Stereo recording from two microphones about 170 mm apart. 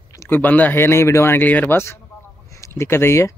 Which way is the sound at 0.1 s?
15° left (ahead or behind).